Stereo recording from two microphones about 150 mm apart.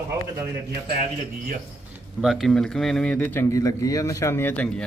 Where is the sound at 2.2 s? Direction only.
Centre (ahead or behind).